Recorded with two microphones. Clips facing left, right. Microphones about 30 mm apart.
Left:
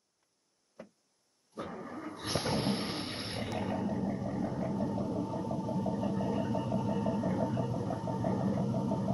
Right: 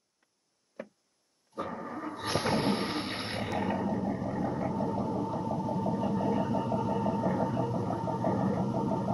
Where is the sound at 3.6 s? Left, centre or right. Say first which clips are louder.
Right 2 dB; right.